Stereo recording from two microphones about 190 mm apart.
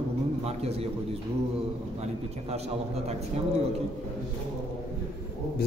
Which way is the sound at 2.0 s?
35° right (ahead or behind).